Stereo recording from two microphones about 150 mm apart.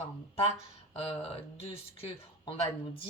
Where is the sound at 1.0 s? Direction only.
40° left (ahead or behind).